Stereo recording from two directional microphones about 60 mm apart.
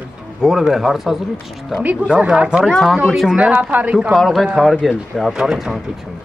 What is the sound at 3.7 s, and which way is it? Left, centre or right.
Speech, right.